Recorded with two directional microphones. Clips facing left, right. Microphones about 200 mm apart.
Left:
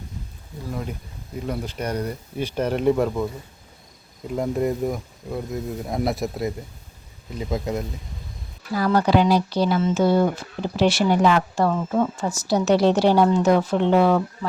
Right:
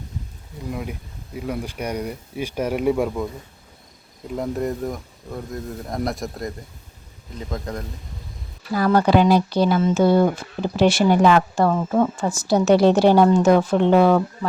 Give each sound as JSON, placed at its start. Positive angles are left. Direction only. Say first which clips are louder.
{"t": 0.6, "sound": "speech", "louder": "right 1 dB", "side_deg": -10}
{"t": 4.3, "sound": "speech", "louder": "left 2 dB", "side_deg": 0}
{"t": 8.7, "sound": "speech", "louder": "right 2 dB", "side_deg": -55}